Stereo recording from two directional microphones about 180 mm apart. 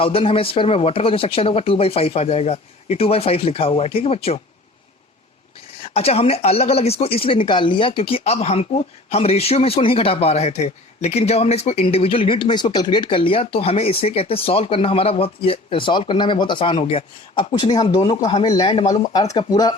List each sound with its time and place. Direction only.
0.0 s speech: 30° left (ahead or behind)
5.8 s speech: 35° left (ahead or behind)